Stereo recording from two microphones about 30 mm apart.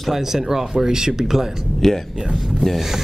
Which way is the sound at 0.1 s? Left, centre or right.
Centre.